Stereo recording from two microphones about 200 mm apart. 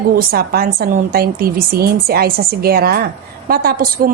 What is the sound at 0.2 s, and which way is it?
A woman's voice, 45° right (ahead or behind).